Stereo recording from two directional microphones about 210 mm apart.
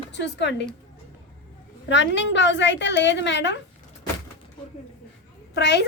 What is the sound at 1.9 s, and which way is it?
A woman's voice, 60° left (ahead or behind).